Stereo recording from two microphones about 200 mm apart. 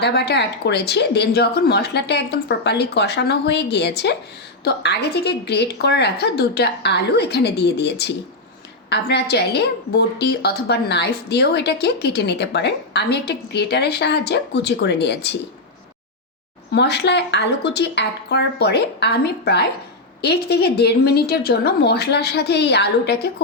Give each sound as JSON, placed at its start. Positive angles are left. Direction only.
{"t": 0.0, "sound": "a woman's voice", "side_deg": 55}
{"t": 16.7, "sound": "a woman's voice", "side_deg": 55}